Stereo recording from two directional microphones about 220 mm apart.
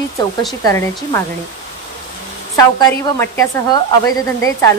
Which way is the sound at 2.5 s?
15° left (ahead or behind).